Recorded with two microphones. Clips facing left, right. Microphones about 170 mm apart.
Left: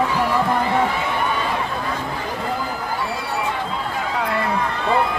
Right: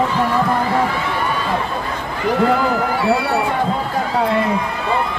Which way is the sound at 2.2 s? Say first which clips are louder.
Right 9 dB; 80° right.